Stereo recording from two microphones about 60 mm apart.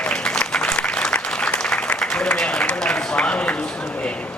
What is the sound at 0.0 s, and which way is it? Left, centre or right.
Applause, centre.